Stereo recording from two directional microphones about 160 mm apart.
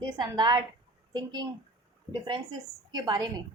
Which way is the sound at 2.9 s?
25° right (ahead or behind).